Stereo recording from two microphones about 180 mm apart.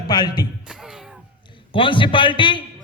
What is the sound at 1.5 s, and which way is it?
A man's voice, 30° left (ahead or behind).